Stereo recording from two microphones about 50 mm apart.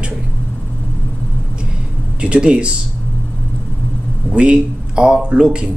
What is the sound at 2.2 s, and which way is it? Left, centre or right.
Speech, right.